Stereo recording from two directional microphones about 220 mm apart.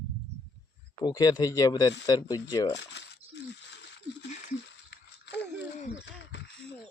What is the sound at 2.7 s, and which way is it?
Speech, 50° left (ahead or behind).